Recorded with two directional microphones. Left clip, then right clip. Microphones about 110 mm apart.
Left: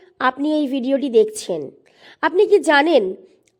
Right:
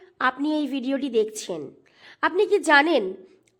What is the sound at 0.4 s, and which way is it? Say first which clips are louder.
A woman's voice: left 6 dB; 35° left (ahead or behind).